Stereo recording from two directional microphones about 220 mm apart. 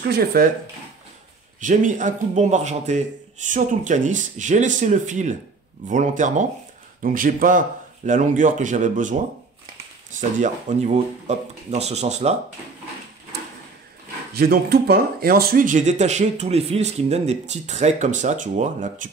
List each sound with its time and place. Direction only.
0.1 s speech: 40° right (ahead or behind)
1.6 s speech: 35° right (ahead or behind)
10.4 s speech: 30° right (ahead or behind)
14.3 s speech: 45° right (ahead or behind)